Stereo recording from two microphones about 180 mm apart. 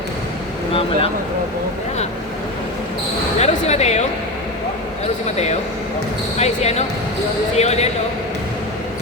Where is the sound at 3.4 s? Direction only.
35° left (ahead or behind).